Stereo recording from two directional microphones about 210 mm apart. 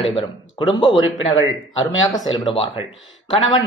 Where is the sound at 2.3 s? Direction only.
25° left (ahead or behind).